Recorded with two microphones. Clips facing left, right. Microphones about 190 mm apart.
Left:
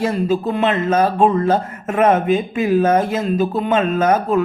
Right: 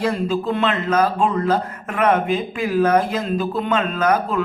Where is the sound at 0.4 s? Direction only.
25° left (ahead or behind).